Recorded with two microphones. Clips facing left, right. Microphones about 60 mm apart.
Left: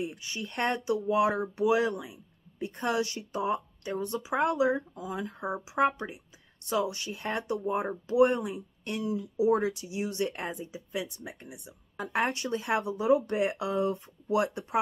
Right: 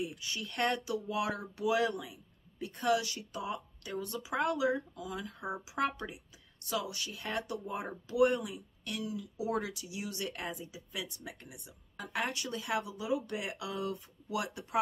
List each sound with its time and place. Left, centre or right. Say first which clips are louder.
0.0 s speech: left 3 dB; left
12.0 s speech: left 7 dB; left